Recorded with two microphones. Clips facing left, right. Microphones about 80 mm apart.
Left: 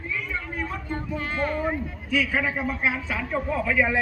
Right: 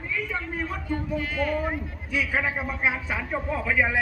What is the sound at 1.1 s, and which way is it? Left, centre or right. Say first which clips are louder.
Speech: left 1 dB; left.